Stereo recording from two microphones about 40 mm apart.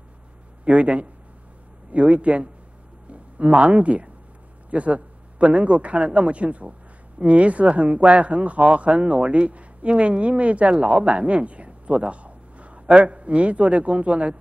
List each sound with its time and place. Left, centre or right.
0.7 s speech: right